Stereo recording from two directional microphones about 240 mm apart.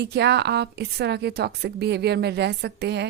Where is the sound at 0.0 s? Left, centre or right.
Right.